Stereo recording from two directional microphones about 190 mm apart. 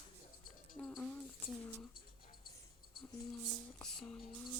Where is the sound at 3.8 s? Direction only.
5° left (ahead or behind).